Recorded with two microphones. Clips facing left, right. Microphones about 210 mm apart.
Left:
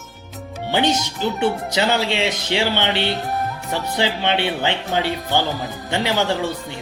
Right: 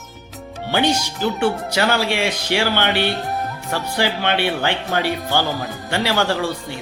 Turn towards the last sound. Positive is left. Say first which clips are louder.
# right 1 dB
turn(degrees=20)  # may be behind; listen again after turning